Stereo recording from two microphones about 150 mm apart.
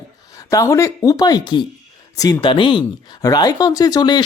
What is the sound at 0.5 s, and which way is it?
Speech, 20° left (ahead or behind).